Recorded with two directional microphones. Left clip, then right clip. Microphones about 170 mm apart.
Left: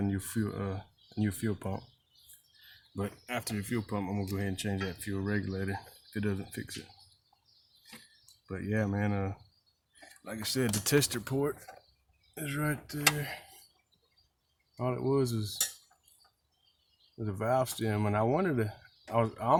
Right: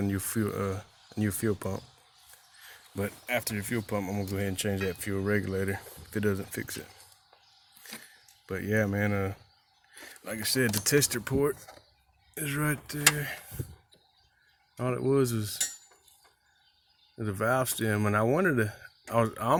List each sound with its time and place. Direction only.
0.0 s speech: 10° right (ahead or behind)
2.9 s speech: 10° right (ahead or behind)
8.4 s speech: 15° right (ahead or behind)
10.8 s speech: 10° left (ahead or behind)
11.1 s speech: 5° right (ahead or behind)
14.8 s speech: 25° right (ahead or behind)
17.2 s speech: 25° right (ahead or behind)